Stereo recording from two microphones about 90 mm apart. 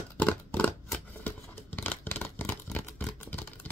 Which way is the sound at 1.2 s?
20° left (ahead or behind).